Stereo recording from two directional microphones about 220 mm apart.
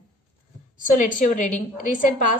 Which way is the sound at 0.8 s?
35° left (ahead or behind).